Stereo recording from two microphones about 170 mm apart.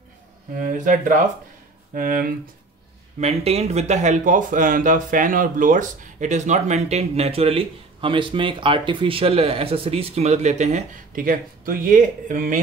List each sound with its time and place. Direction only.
0.6 s speech: 50° right (ahead or behind)
3.2 s speech: 40° right (ahead or behind)